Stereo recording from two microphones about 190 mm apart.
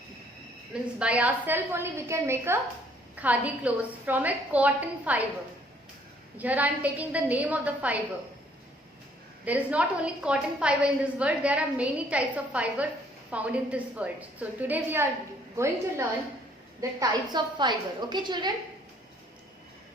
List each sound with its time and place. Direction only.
0.7 s a woman's voice: 5° right (ahead or behind)
6.3 s a woman's voice: 10° right (ahead or behind)
9.4 s a woman's voice: 5° right (ahead or behind); by 18.5 s 25° right (ahead or behind)